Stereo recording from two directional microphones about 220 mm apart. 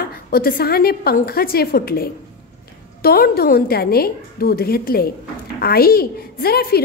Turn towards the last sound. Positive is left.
turn(degrees=45)  # may be behind; listen again after turning